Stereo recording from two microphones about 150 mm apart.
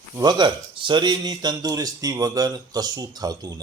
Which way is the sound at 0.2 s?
30° right (ahead or behind).